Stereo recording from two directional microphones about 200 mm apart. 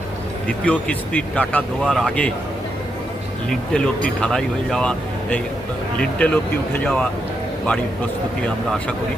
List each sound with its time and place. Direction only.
0.4 s speech: 5° left (ahead or behind)
3.5 s speech: 5° left (ahead or behind)